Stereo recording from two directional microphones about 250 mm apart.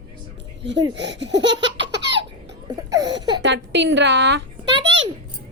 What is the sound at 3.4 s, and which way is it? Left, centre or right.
Speech, right.